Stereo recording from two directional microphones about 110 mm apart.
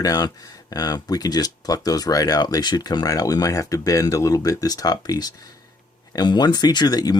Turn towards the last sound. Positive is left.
turn(degrees=35)  # may be behind; listen again after turning